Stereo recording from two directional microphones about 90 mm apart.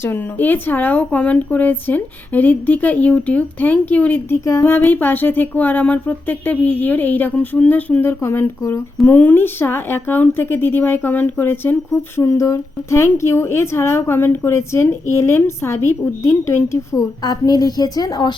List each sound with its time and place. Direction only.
0.0 s speech: 20° left (ahead or behind)
4.4 s speech: 35° left (ahead or behind); by 8.1 s 20° left (ahead or behind)
8.2 s speech: 30° left (ahead or behind); by 18.3 s 50° left (ahead or behind)